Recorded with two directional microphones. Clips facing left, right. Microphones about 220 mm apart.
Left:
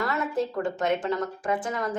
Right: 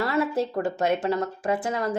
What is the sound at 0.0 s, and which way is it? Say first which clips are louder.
A woman's voice: right 3 dB; 30° right (ahead or behind).